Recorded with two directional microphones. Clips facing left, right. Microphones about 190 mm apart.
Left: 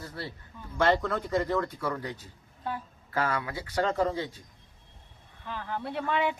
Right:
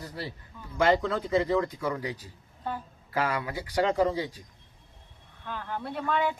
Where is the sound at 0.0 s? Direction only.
15° right (ahead or behind).